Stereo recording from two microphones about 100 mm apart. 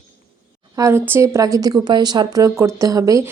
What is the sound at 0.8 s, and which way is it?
Speech, 20° right (ahead or behind).